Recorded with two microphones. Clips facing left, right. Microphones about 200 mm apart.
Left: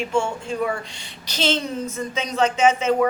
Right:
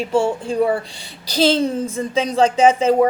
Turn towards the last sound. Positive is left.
turn(degrees=-30)  # may be behind; listen again after turning